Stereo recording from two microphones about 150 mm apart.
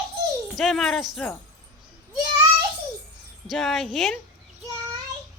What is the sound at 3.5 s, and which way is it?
Speech, centre (ahead or behind).